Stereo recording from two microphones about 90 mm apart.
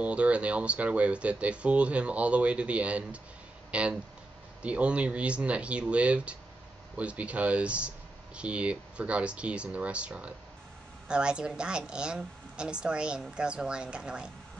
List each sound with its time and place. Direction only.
0.0 s speech: 15° right (ahead or behind)